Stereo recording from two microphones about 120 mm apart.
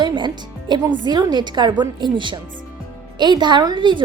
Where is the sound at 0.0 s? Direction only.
40° right (ahead or behind).